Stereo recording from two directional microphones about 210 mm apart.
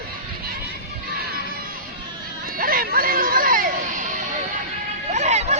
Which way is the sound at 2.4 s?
45° right (ahead or behind).